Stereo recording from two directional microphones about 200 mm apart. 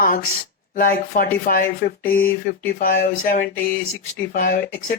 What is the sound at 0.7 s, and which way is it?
Speech, 45° left (ahead or behind).